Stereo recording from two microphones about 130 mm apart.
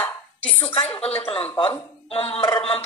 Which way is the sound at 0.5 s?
45° left (ahead or behind).